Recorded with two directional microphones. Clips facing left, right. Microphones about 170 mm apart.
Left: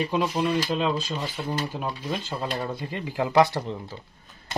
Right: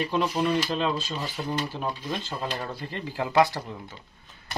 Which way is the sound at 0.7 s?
10° left (ahead or behind).